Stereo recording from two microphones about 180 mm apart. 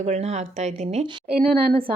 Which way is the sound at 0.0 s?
40° right (ahead or behind).